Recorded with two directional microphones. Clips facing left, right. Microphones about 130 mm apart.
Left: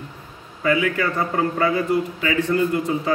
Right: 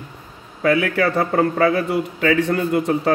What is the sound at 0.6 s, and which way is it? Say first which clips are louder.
A man's voice: right 3 dB; 65° right (ahead or behind).